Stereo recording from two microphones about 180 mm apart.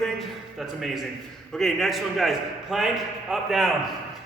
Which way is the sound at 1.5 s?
Centre (ahead or behind).